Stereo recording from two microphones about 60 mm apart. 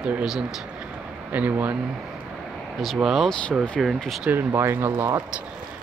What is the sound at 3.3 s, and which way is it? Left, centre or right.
Speech, centre.